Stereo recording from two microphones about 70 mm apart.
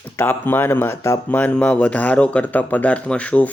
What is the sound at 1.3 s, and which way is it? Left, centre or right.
Speech, left.